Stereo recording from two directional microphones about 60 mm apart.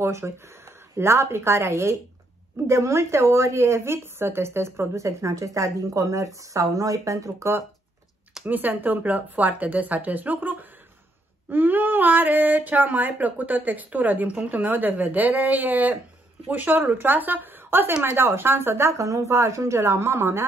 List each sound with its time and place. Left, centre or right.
0.0 s speech: right
8.5 s a woman's voice: right
18.9 s a woman's voice: right
19.3 s speech: right